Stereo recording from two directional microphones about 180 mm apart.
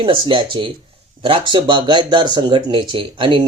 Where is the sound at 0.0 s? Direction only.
30° right (ahead or behind).